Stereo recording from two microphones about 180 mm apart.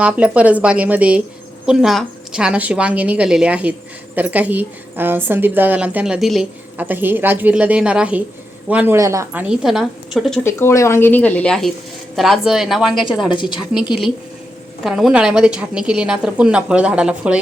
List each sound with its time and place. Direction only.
0.0 s a woman's voice: 5° right (ahead or behind)
10.4 s a woman's voice: 15° left (ahead or behind)
13.3 s a woman's voice: 25° left (ahead or behind)
13.7 s a woman's voice: centre (ahead or behind)